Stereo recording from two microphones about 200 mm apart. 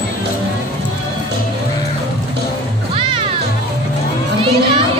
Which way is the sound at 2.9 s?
25° right (ahead or behind).